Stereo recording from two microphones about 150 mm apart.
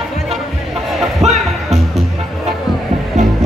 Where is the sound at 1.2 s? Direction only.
45° right (ahead or behind).